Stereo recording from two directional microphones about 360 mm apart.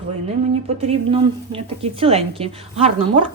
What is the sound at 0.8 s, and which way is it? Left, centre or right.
A woman's voice, centre.